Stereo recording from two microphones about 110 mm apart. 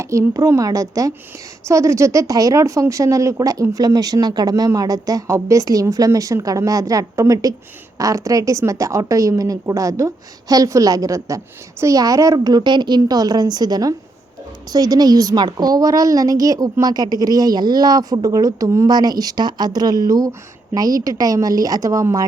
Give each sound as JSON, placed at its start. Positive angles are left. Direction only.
{"t": 0.0, "sound": "a woman's voice", "side_deg": -25}